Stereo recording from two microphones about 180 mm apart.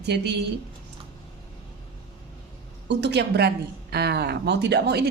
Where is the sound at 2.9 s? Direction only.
70° right (ahead or behind).